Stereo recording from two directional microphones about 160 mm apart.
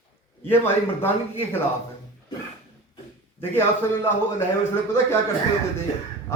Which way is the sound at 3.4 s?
15° left (ahead or behind).